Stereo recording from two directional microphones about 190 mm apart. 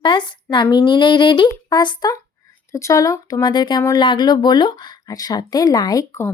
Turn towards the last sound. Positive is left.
turn(degrees=15)  # may be behind; listen again after turning